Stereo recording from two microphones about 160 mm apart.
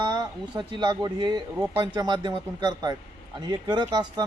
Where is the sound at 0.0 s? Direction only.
25° right (ahead or behind).